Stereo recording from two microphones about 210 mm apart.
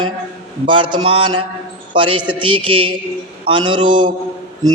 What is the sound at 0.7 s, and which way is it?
Speech, 25° right (ahead or behind).